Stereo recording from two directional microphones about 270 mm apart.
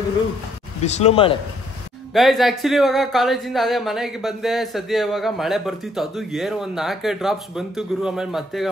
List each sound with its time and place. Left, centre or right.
0.8 s speech: left
2.1 s speech: centre